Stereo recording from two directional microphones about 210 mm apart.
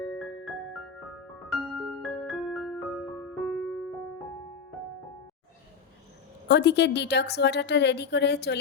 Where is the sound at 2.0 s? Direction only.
Centre (ahead or behind).